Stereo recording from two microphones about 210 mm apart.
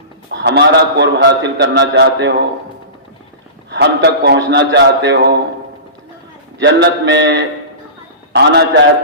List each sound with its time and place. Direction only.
0.3 s a man's voice: 50° right (ahead or behind)
3.7 s a man's voice: 55° right (ahead or behind)
6.6 s a man's voice: 55° right (ahead or behind)